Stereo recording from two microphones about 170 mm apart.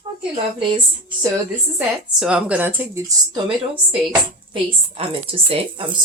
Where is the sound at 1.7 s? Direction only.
5° right (ahead or behind).